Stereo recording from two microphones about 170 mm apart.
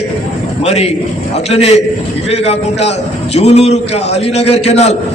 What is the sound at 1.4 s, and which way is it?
A man's voice, 35° left (ahead or behind).